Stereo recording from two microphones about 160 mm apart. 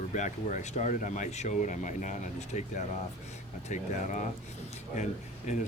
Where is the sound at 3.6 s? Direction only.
50° left (ahead or behind).